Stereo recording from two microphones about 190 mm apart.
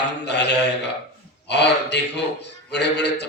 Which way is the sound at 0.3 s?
65° left (ahead or behind).